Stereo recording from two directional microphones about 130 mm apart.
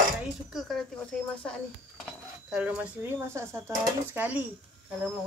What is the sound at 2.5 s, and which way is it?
Speech, 10° right (ahead or behind).